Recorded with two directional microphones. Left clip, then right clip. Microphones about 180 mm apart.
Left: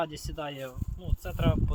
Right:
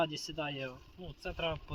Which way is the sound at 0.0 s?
25° left (ahead or behind).